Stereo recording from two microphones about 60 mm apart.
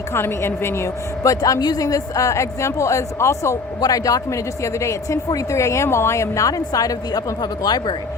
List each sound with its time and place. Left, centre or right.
0.1 s a woman's voice: left
1.2 s a woman's voice: left
3.8 s a woman's voice: left